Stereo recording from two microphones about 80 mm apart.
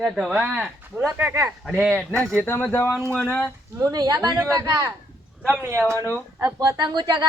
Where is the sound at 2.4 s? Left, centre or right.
Left.